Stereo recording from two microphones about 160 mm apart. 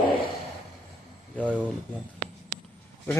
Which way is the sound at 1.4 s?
10° left (ahead or behind).